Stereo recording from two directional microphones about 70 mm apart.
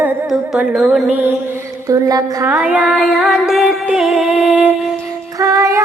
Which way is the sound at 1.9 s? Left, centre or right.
Right.